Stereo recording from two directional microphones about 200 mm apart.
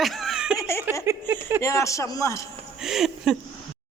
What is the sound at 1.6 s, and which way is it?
Speech, 15° left (ahead or behind).